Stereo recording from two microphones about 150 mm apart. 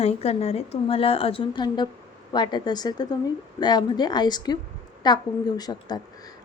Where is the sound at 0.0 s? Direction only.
45° left (ahead or behind).